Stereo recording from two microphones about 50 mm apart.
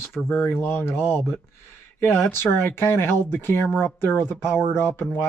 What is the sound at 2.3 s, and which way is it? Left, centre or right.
Speech, left.